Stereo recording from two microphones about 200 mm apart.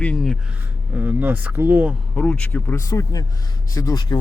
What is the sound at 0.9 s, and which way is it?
Speech, 10° right (ahead or behind).